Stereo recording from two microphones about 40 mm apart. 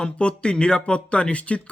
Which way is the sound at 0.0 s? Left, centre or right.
Left.